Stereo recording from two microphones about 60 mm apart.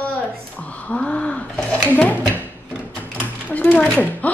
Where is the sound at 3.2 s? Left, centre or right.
Left.